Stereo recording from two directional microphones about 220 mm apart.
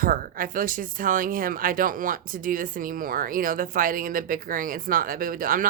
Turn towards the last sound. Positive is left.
turn(degrees=-40)  # may be behind; listen again after turning